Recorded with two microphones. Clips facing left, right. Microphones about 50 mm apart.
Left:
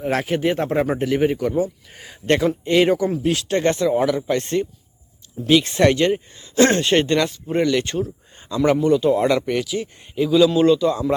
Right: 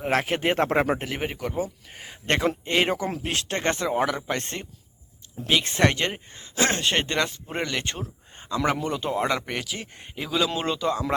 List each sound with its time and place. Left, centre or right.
0.0 s speech: right
0.9 s speech: right
2.2 s speech: right
3.1 s speech: right
5.8 s speech: right
6.6 s speech: centre
8.8 s speech: right
9.0 s speech: centre